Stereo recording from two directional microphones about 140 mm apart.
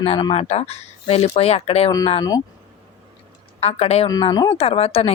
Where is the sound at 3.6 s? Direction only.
45° left (ahead or behind).